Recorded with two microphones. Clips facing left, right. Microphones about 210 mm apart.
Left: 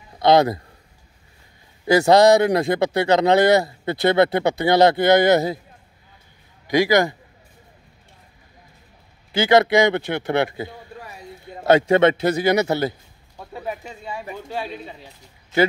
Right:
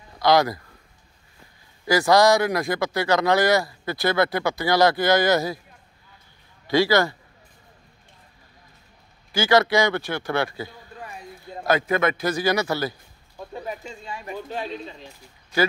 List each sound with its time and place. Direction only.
0.2 s speech: 25° left (ahead or behind)
1.9 s speech: 25° left (ahead or behind)
6.7 s a man's voice: 15° left (ahead or behind)
9.3 s speech: 20° left (ahead or behind)
11.9 s speech: 30° left (ahead or behind)